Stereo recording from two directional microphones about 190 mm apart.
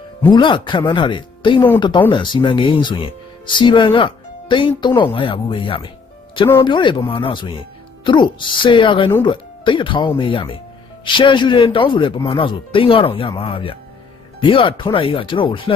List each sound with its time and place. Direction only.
0.3 s speech: 25° left (ahead or behind)